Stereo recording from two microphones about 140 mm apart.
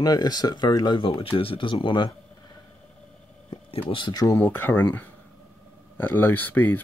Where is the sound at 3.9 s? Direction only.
35° left (ahead or behind).